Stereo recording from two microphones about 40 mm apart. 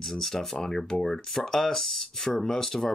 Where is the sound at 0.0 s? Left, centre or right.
Centre.